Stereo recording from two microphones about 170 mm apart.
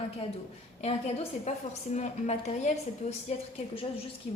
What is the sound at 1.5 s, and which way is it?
A woman's voice, 40° left (ahead or behind).